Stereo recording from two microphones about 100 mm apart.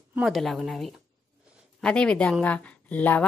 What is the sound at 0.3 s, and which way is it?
A woman's voice, centre (ahead or behind).